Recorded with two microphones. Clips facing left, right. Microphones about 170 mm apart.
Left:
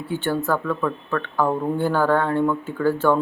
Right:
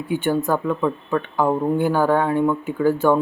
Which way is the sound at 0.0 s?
15° right (ahead or behind).